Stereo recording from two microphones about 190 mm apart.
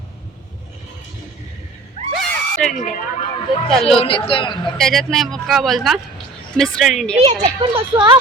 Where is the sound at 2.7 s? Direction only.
40° left (ahead or behind).